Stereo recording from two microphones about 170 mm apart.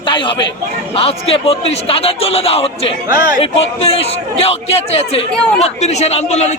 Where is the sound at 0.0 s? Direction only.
30° left (ahead or behind).